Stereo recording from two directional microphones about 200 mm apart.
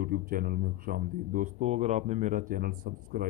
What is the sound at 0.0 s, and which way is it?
Speech, 45° right (ahead or behind).